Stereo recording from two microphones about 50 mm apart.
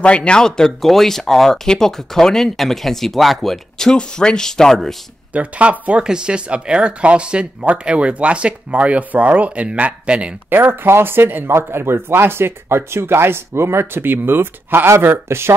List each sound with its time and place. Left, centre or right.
0.0 s speech: left
5.3 s speech: right
10.5 s speech: right
11.4 s speech: right